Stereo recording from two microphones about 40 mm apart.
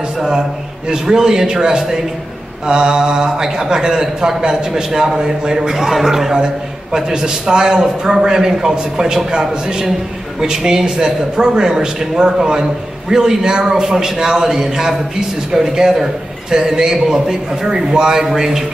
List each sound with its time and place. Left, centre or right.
0.8 s a man's voice: centre